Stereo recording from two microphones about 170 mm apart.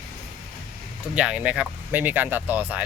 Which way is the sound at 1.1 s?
5° right (ahead or behind).